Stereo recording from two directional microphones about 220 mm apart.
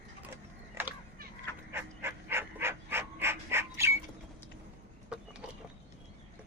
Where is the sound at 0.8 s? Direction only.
10° right (ahead or behind).